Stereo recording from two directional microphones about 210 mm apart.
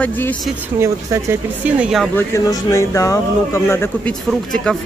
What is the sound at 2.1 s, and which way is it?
Speech, 15° left (ahead or behind).